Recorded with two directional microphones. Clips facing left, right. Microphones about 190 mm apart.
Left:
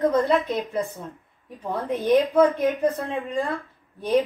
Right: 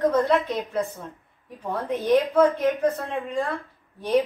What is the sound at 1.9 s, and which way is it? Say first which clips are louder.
A woman's voice: left 1 dB; 15° left (ahead or behind).